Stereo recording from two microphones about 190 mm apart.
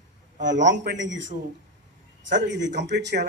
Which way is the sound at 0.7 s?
70° right (ahead or behind).